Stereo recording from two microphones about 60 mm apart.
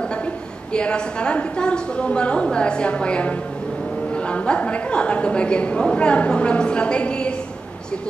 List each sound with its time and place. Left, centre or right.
0.7 s a woman's voice: centre